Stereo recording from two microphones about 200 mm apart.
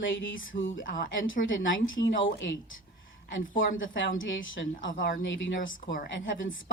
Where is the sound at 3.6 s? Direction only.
75° left (ahead or behind).